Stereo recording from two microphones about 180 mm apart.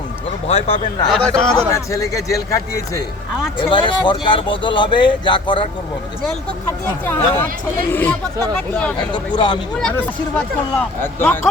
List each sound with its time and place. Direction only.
0.4 s speech: 30° left (ahead or behind)
1.0 s a man's voice: 5° left (ahead or behind)
1.5 s speech: 20° left (ahead or behind)
6.8 s speech: 10° left (ahead or behind)
9.1 s speech: 25° left (ahead or behind)
9.8 s speech: 10° left (ahead or behind)